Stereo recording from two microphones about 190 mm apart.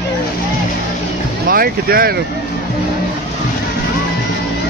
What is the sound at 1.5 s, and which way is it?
Speech, 50° right (ahead or behind).